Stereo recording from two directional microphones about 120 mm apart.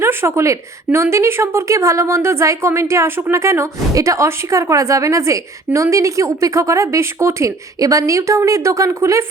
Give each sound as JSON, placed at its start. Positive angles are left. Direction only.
{"t": 0.0, "sound": "a woman's voice", "side_deg": -20}